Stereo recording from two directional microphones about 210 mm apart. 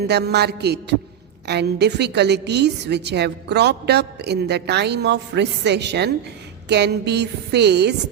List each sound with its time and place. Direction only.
0.0 s a woman's voice: 50° right (ahead or behind)